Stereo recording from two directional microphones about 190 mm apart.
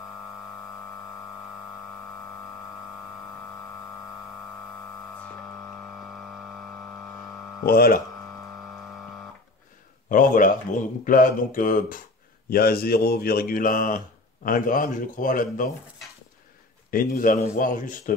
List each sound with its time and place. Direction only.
7.6 s speech: 50° left (ahead or behind)
10.0 s speech: 45° left (ahead or behind)
16.9 s speech: 45° left (ahead or behind)